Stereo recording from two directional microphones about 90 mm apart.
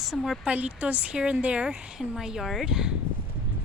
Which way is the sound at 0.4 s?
15° right (ahead or behind).